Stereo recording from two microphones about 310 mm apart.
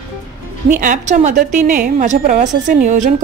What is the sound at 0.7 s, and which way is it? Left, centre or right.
A woman's voice, right.